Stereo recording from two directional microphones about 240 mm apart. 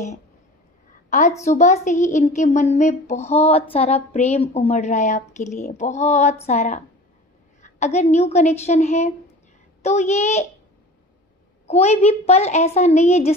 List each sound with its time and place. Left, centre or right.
1.4 s speech: left
11.6 s speech: left